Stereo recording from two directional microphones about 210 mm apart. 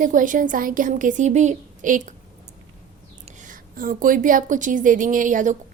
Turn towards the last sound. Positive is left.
turn(degrees=-40)  # may be behind; listen again after turning